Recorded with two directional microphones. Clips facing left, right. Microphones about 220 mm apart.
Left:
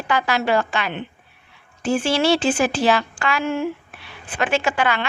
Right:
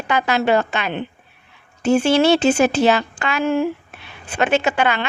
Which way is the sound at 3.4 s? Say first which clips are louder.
Right 7 dB; 35° right (ahead or behind).